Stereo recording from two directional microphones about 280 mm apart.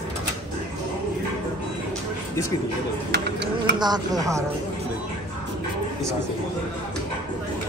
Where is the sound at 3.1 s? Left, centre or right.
Right.